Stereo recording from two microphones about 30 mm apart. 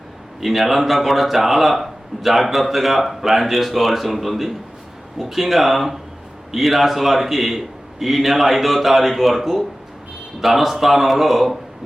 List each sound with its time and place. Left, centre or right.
0.3 s speech: centre